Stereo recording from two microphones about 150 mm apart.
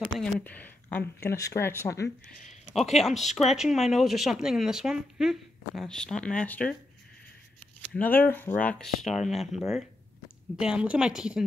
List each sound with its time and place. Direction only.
0.2 s speech: 10° left (ahead or behind)
2.7 s speech: centre (ahead or behind)
7.9 s speech: 10° left (ahead or behind); by 11.4 s 5° right (ahead or behind)